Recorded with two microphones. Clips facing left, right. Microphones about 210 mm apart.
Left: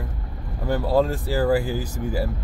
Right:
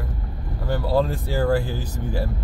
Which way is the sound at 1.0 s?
5° left (ahead or behind).